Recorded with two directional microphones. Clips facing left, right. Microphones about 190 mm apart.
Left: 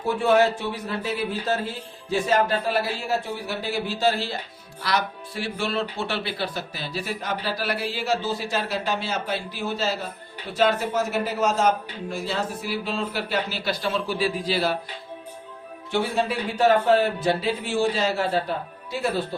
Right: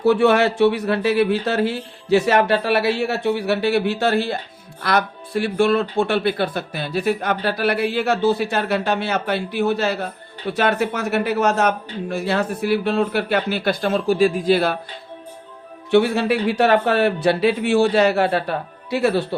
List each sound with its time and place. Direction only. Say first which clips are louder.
0.0 s a man's voice: right 5 dB; 75° right (ahead or behind); by 14.8 s 55° right (ahead or behind)
15.9 s a man's voice: right 8 dB; 65° right (ahead or behind)